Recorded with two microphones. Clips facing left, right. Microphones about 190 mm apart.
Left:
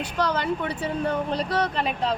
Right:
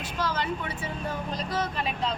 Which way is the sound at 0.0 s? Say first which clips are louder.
Left 5 dB; 65° left (ahead or behind).